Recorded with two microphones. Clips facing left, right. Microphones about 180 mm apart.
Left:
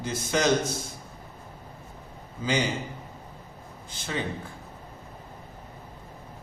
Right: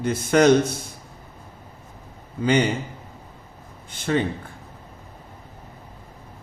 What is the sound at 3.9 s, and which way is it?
Speech, 60° right (ahead or behind).